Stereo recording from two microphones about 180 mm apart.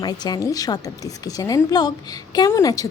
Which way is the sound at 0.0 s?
20° left (ahead or behind).